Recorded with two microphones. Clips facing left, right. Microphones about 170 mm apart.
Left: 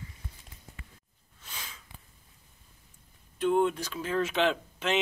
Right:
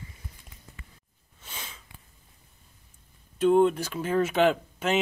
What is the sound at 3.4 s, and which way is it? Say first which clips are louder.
Speech: right 5 dB; 5° right (ahead or behind).